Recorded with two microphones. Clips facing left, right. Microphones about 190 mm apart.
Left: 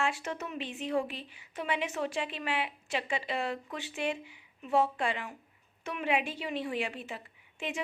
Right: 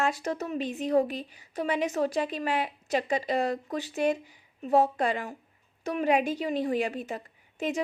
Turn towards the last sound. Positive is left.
turn(degrees=-40)  # may be behind; listen again after turning